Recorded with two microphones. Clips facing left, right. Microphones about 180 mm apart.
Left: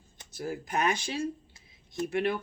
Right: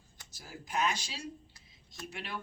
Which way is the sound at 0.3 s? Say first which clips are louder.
Left 5 dB; 55° left (ahead or behind).